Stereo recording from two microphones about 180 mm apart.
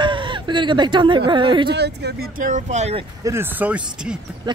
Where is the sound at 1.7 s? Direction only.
70° right (ahead or behind); by 3.1 s 35° right (ahead or behind).